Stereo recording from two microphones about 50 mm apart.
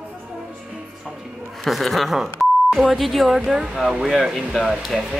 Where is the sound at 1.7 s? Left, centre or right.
Centre.